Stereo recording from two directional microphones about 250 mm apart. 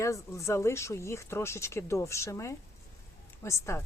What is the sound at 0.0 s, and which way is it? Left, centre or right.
Speech, centre.